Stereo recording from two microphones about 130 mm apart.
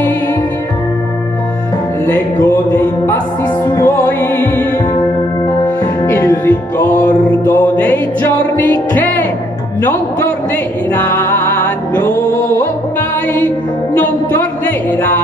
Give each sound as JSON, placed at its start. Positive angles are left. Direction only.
{"t": 2.0, "sound": "music", "side_deg": 15}
{"t": 6.0, "sound": "music", "side_deg": 15}
{"t": 10.9, "sound": "music", "side_deg": 15}
{"t": 13.9, "sound": "music", "side_deg": 15}